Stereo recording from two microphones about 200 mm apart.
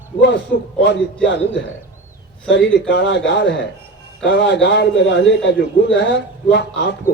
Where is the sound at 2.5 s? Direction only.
60° left (ahead or behind).